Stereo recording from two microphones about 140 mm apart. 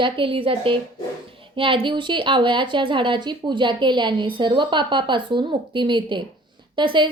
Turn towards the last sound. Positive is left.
turn(degrees=-35)  # may be behind; listen again after turning